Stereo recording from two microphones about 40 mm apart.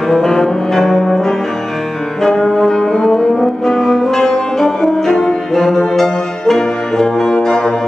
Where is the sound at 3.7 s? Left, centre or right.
Centre.